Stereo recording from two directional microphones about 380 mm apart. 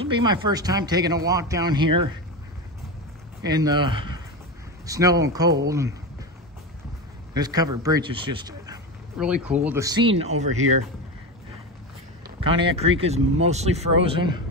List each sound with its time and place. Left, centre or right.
0.0 s speech: centre
3.4 s speech: centre
7.3 s speech: centre
10.6 s speech: right
12.6 s speech: centre